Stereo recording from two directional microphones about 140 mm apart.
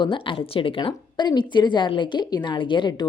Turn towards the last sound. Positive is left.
turn(degrees=30)  # may be behind; listen again after turning